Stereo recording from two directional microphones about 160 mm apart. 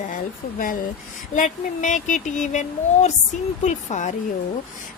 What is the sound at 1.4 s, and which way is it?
Speech, 50° left (ahead or behind).